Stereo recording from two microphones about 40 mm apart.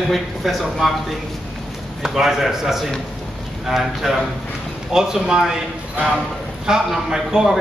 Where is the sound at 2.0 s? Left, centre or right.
Centre.